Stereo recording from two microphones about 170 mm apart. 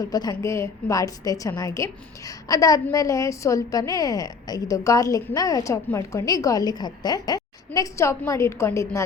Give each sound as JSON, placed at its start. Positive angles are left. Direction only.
{"t": 0.0, "sound": "a woman's voice", "side_deg": 20}